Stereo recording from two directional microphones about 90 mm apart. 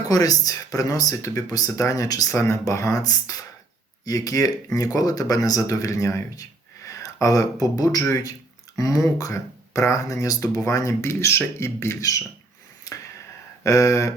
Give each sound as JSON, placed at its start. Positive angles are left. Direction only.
{"t": 0.1, "sound": "speech", "side_deg": 45}
{"t": 2.3, "sound": "speech", "side_deg": 30}
{"t": 13.7, "sound": "speech", "side_deg": 35}